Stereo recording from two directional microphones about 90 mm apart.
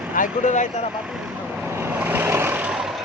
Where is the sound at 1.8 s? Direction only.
20° right (ahead or behind).